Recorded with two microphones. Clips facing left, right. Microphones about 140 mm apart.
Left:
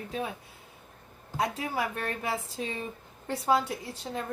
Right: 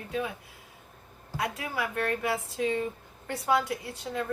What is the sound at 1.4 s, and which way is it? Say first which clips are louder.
Speech: left 2 dB; 30° left (ahead or behind).